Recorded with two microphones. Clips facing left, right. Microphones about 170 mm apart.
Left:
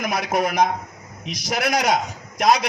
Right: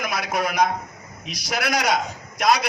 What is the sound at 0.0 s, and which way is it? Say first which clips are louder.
A man's voice: left 3 dB; 50° left (ahead or behind).